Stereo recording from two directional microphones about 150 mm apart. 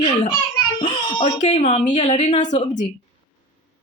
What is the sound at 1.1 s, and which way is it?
Baby cry, 30° left (ahead or behind).